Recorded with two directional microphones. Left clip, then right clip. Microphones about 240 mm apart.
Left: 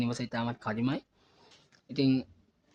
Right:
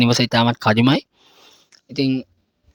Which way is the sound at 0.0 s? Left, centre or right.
Right.